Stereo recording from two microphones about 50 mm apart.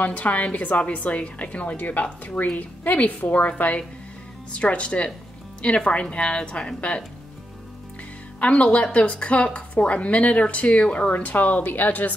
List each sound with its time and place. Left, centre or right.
0.0 s a woman's voice: left
8.4 s speech: left